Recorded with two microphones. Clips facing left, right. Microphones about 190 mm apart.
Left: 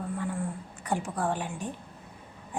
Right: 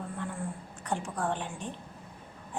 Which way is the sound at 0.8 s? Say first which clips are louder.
Left 3 dB; 10° left (ahead or behind).